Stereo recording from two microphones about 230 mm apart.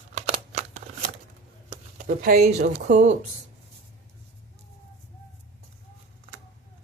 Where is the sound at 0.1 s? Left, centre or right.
Right.